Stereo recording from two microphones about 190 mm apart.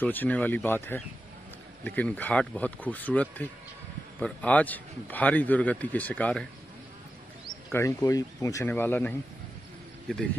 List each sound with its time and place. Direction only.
0.0 s a man's voice: 10° left (ahead or behind)
7.4 s a man's voice: 15° left (ahead or behind)